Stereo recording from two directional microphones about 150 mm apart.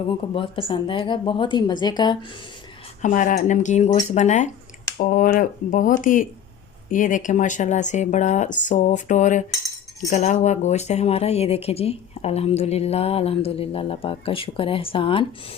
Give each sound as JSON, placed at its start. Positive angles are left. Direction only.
{"t": 0.1, "sound": "speech", "side_deg": 35}
{"t": 3.0, "sound": "speech", "side_deg": 60}
{"t": 4.9, "sound": "speech", "side_deg": 65}